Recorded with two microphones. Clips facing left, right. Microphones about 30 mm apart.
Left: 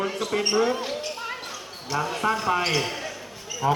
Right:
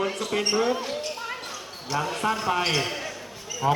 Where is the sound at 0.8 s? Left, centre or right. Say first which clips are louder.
Left 1 dB; centre.